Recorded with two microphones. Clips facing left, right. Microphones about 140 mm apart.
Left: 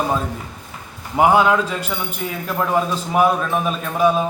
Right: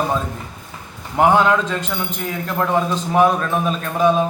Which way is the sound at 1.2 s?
5° left (ahead or behind).